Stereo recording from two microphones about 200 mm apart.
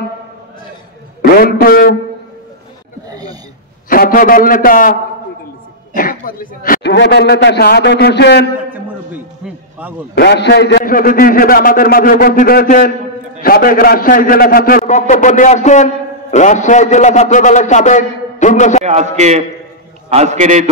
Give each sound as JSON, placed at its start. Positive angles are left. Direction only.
{"t": 1.2, "sound": "a man's voice", "side_deg": 50}
{"t": 3.1, "sound": "a sound", "side_deg": -20}
{"t": 3.9, "sound": "a man's voice", "side_deg": 45}
{"t": 5.9, "sound": "a man's voice", "side_deg": 45}
{"t": 10.1, "sound": "a man's voice", "side_deg": 55}
{"t": 18.9, "sound": "a man's voice", "side_deg": -35}